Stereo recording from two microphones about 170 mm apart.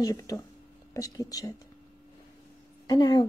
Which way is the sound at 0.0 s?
20° left (ahead or behind).